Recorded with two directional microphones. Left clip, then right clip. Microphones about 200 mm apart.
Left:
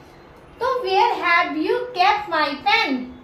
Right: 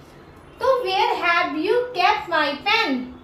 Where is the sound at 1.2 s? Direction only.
10° right (ahead or behind).